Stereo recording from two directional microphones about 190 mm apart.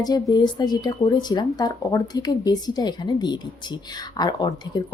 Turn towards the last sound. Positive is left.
turn(degrees=20)  # may be behind; listen again after turning